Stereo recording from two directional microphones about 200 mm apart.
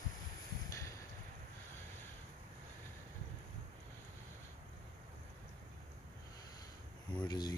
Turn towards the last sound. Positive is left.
turn(degrees=20)  # may be behind; listen again after turning